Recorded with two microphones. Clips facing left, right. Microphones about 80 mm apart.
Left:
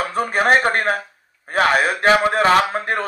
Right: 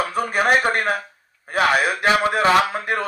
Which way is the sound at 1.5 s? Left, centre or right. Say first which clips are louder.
Left 2 dB; left.